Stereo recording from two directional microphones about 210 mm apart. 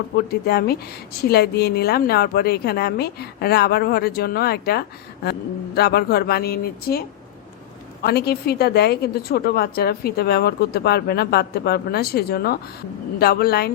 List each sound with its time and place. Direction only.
0.3 s a woman's voice: 50° left (ahead or behind)
8.0 s a woman's voice: 50° left (ahead or behind)